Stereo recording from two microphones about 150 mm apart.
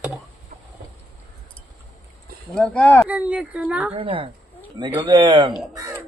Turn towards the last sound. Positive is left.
turn(degrees=-20)  # may be behind; listen again after turning